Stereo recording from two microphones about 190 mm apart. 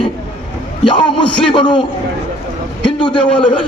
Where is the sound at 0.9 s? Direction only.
25° left (ahead or behind).